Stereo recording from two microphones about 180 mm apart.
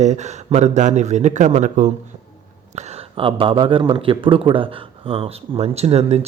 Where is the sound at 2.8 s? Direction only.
30° right (ahead or behind).